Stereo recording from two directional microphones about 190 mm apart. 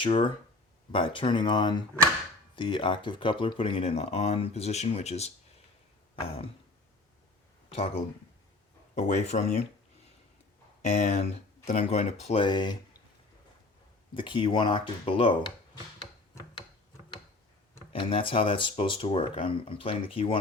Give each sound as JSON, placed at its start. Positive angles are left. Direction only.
{"t": 0.0, "sound": "speech", "side_deg": 30}
{"t": 7.7, "sound": "speech", "side_deg": 30}
{"t": 10.8, "sound": "speech", "side_deg": 35}
{"t": 14.1, "sound": "speech", "side_deg": 25}
{"t": 16.0, "sound": "a sound", "side_deg": 25}
{"t": 17.9, "sound": "speech", "side_deg": 25}